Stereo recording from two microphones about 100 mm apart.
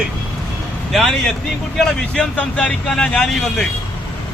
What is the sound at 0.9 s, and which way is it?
Speech, centre (ahead or behind).